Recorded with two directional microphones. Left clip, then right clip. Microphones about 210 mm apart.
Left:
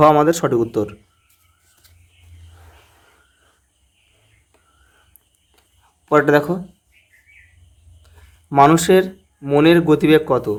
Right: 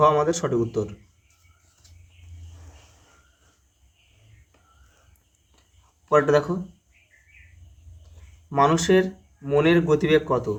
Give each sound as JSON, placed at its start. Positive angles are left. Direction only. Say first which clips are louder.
{"t": 0.0, "sound": "speech", "louder": "left 7 dB", "side_deg": 35}
{"t": 6.1, "sound": "speech", "louder": "left 5 dB", "side_deg": 35}
{"t": 8.4, "sound": "speech", "louder": "left 7 dB", "side_deg": 40}